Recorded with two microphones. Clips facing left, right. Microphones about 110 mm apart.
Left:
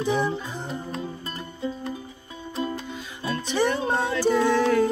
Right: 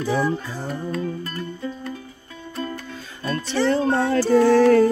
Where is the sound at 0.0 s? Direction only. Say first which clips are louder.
Right 2 dB; 20° left (ahead or behind).